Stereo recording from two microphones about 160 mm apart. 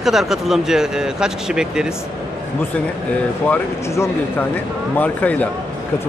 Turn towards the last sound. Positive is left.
turn(degrees=10)  # may be behind; listen again after turning